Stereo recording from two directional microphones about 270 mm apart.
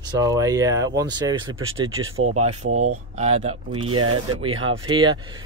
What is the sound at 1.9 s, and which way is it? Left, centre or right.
Speech, right.